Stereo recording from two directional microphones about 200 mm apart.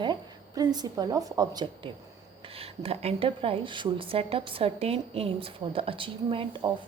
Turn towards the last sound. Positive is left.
turn(degrees=-25)  # may be behind; listen again after turning